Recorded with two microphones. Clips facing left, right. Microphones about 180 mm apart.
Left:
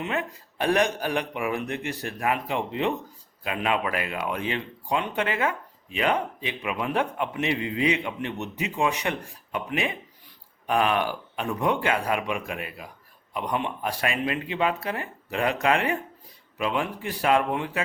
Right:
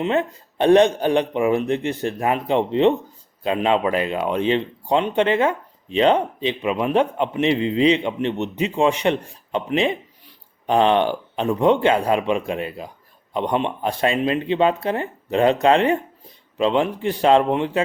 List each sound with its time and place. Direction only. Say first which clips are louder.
0.0 s speech: right 8 dB; 25° right (ahead or behind)